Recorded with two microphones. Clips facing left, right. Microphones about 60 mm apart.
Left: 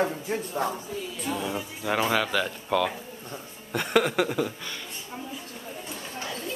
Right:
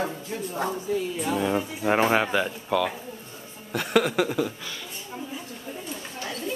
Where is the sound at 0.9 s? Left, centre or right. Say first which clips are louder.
Right 8 dB; right.